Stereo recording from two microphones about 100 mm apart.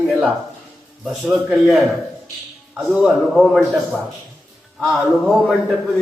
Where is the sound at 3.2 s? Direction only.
5° left (ahead or behind).